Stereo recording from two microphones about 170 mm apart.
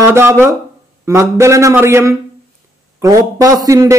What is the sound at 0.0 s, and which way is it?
A man's voice, 15° right (ahead or behind).